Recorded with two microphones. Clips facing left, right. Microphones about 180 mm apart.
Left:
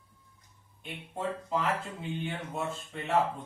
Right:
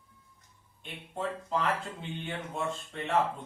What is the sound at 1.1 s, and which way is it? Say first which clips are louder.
Speech: even; 5° left (ahead or behind).